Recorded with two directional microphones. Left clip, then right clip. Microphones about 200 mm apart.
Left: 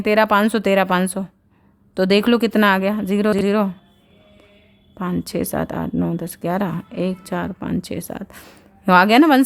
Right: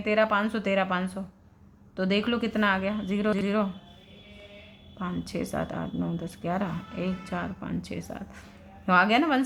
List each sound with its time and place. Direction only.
0.0 s speech: 55° left (ahead or behind)
4.9 s speech: 50° left (ahead or behind)